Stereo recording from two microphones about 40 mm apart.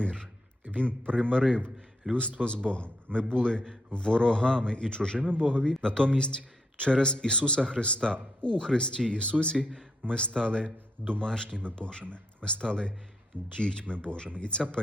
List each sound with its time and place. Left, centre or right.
0.0 s a man's voice: centre
2.0 s a man's voice: right
2.6 s a man's voice: left